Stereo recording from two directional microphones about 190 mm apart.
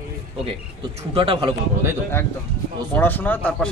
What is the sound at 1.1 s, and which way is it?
Speech, 25° right (ahead or behind).